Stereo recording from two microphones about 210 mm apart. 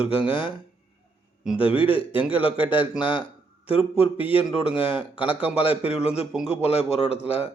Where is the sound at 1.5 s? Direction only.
25° left (ahead or behind).